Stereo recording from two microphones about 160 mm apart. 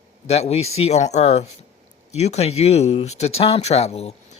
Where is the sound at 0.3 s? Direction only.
40° left (ahead or behind).